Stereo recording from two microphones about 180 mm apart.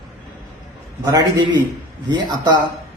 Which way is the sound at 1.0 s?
20° right (ahead or behind).